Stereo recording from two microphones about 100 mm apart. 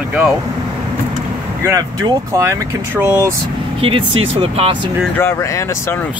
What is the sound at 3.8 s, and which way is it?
Speech, 60° right (ahead or behind).